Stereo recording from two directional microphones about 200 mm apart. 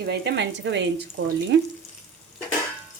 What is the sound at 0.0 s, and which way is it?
Speech, 55° right (ahead or behind).